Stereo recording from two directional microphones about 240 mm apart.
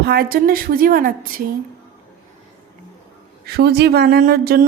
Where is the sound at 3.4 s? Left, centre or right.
Right.